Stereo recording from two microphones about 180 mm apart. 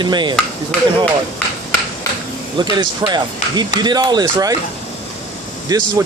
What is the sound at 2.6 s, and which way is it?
Speech, 25° right (ahead or behind).